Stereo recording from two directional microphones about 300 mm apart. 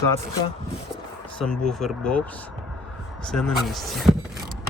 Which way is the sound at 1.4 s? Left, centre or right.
Centre.